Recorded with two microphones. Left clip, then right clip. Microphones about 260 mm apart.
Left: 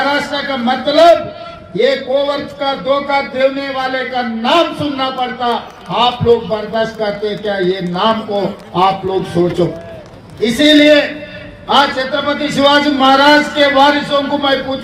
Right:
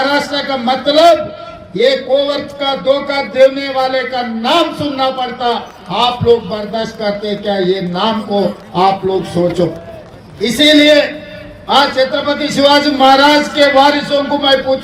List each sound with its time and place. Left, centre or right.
0.0 s a man's voice: right
10.4 s a man's voice: right